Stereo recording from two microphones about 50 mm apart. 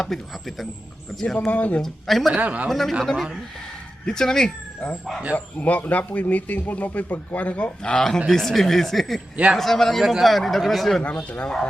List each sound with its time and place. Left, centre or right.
0.0 s speech: centre
1.5 s a man's voice: left
1.8 s speech: centre
2.3 s speech: right
2.6 s speech: centre
4.0 s speech: centre
5.3 s a man's voice: left
8.3 s speech: centre
10.0 s speech: centre
11.0 s speech: left